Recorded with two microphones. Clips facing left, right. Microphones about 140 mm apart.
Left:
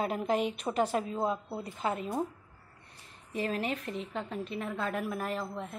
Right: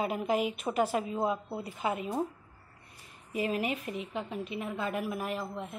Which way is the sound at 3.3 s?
10° right (ahead or behind).